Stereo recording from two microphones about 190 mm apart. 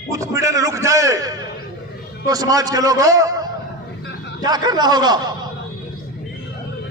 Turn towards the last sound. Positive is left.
turn(degrees=-20)  # may be behind; listen again after turning